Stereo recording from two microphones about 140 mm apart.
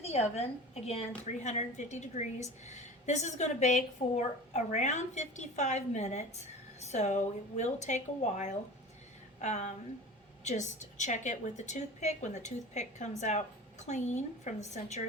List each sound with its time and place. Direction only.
0.0 s a woman's voice: 50° left (ahead or behind)